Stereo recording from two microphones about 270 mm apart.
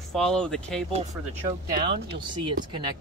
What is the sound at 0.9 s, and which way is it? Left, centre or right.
Speech, right.